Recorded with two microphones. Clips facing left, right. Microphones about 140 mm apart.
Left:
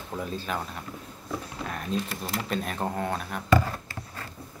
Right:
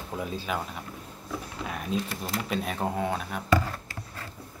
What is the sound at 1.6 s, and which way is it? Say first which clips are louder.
Speech: right 1 dB; 5° right (ahead or behind).